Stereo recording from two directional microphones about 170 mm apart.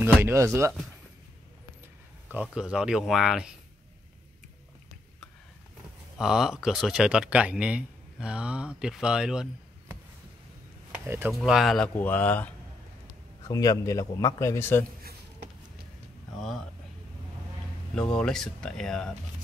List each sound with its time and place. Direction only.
0.0 s speech: 15° right (ahead or behind)
2.2 s speech: 5° right (ahead or behind)
6.1 s speech: 5° right (ahead or behind)
11.1 s speech: 15° right (ahead or behind)
11.3 s speech: centre (ahead or behind)
13.4 s a man's voice: 20° left (ahead or behind)
16.3 s speech: centre (ahead or behind)
17.9 s speech: 5° left (ahead or behind)